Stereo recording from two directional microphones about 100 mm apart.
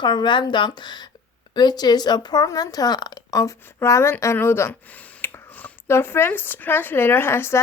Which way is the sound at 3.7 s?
30° left (ahead or behind).